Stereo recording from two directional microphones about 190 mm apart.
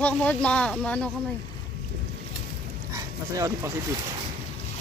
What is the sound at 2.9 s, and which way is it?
Dog, 15° right (ahead or behind).